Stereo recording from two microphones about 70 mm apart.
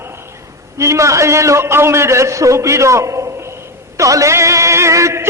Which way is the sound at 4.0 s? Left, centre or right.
Right.